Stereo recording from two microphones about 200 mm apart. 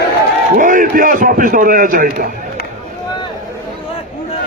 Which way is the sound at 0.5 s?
40° right (ahead or behind).